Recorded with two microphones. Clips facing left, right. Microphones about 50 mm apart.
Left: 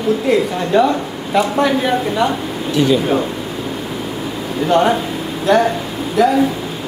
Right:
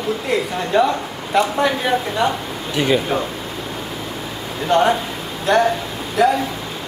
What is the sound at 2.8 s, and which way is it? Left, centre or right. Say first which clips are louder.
Speech: left 4 dB; right.